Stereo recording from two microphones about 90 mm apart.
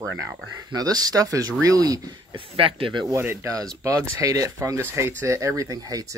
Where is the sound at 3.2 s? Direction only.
25° right (ahead or behind).